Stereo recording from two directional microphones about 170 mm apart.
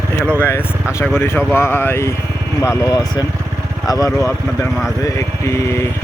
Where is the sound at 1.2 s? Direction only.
10° left (ahead or behind).